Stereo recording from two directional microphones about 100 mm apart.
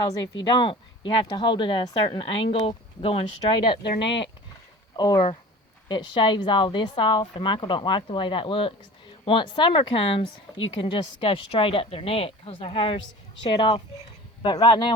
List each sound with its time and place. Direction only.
0.0 s speech: 45° left (ahead or behind); by 3.8 s 65° left (ahead or behind)
4.9 s a woman's voice: 40° left (ahead or behind)